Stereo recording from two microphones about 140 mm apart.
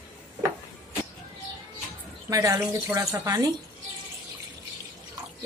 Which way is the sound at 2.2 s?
20° right (ahead or behind).